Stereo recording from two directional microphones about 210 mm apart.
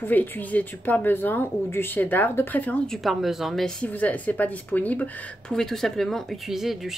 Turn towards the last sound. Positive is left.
turn(degrees=0)  # may be behind; listen again after turning